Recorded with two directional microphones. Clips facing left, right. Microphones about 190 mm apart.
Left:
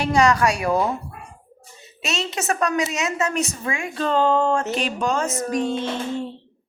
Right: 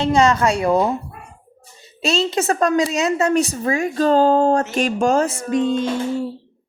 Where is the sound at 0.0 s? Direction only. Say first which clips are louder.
Right 2 dB; 25° right (ahead or behind).